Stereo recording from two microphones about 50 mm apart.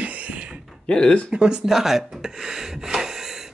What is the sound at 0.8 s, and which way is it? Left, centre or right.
Speech, centre.